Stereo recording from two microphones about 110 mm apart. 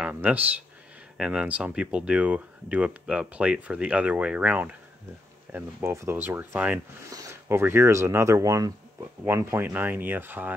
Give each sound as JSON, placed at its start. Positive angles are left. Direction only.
{"t": 0.0, "sound": "speech", "side_deg": -15}
{"t": 5.5, "sound": "speech", "side_deg": -20}